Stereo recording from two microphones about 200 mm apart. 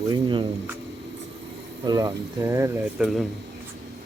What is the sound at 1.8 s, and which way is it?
Speech, 20° right (ahead or behind).